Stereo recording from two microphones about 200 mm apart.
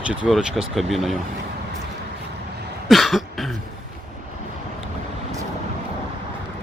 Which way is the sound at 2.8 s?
Centre (ahead or behind).